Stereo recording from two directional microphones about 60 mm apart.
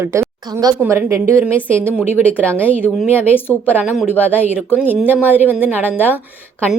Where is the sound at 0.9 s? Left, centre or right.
Right.